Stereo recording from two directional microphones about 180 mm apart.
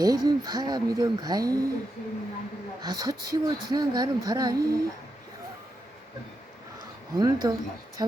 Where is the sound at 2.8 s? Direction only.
20° right (ahead or behind).